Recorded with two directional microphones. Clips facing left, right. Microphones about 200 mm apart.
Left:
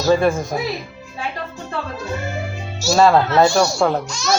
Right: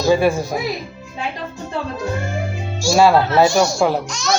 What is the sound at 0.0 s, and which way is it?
Speech, 10° right (ahead or behind).